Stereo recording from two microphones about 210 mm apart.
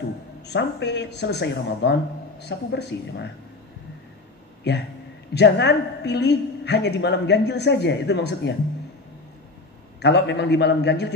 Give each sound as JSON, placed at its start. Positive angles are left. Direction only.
{"t": 0.5, "sound": "a woman's voice", "side_deg": 55}
{"t": 4.7, "sound": "a woman's voice", "side_deg": 50}
{"t": 10.0, "sound": "a man's voice", "side_deg": 55}